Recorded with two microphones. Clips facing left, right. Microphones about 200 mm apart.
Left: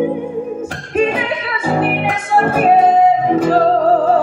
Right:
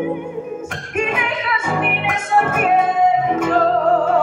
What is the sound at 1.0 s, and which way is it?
Music, 35° left (ahead or behind).